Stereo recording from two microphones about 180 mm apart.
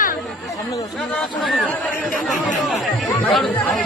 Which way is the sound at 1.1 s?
Centre (ahead or behind).